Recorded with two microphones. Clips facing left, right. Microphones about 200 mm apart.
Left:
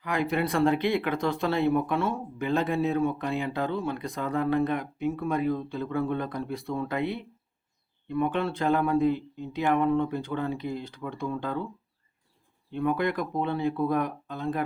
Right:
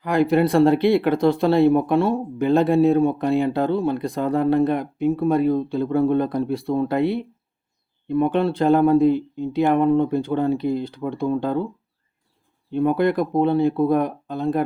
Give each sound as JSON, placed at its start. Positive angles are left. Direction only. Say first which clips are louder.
{"t": 0.0, "sound": "speech", "louder": "right 10 dB", "side_deg": -35}
{"t": 12.7, "sound": "speech", "louder": "right 8 dB", "side_deg": -35}